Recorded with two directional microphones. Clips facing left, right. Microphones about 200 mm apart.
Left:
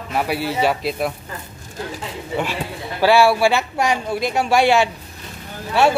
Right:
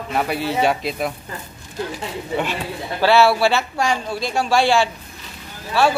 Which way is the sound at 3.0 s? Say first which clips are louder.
Left 1 dB; 15° left (ahead or behind).